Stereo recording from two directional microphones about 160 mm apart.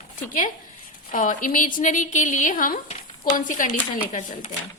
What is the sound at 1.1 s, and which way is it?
A woman's voice, 55° left (ahead or behind).